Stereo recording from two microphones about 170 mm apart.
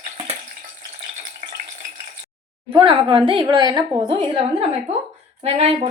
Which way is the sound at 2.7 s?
30° right (ahead or behind).